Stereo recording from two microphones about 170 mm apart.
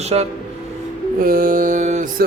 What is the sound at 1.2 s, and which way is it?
Mantra, 55° right (ahead or behind).